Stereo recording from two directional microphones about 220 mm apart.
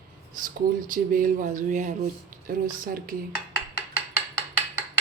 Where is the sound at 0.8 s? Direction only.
40° right (ahead or behind).